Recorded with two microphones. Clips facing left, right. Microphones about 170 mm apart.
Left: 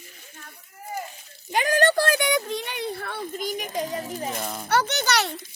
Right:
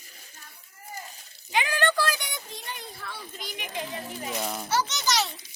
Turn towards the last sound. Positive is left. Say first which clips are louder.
# left 4 dB
turn(degrees=60)  # may be behind; listen again after turning